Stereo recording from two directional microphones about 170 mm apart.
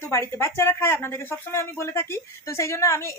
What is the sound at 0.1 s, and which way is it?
A woman's voice, 15° left (ahead or behind).